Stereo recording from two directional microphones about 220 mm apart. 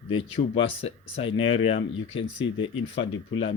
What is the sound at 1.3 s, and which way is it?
Speech, 25° left (ahead or behind).